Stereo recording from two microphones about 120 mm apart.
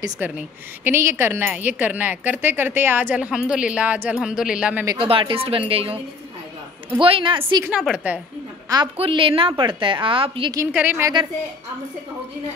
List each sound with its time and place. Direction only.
0.2 s a woman's voice: 15° right (ahead or behind)
5.0 s a woman's voice: 50° right (ahead or behind)
7.8 s speech: 10° right (ahead or behind)
8.9 s a woman's voice: 50° right (ahead or behind)
10.7 s speech: 15° right (ahead or behind)